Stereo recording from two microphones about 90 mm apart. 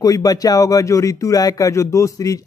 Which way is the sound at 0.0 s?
45° left (ahead or behind).